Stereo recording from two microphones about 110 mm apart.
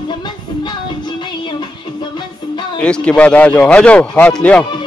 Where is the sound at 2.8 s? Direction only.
10° left (ahead or behind).